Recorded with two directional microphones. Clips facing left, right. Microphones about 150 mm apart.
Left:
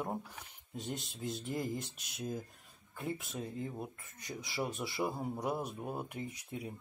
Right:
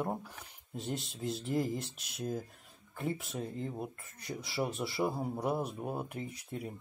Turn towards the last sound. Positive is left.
turn(degrees=0)  # may be behind; listen again after turning